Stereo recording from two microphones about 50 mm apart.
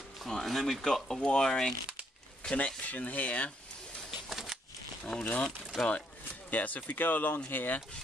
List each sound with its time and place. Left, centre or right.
0.3 s speech: centre
2.5 s speech: left
4.3 s a sound: centre
5.1 s speech: centre
5.8 s speech: left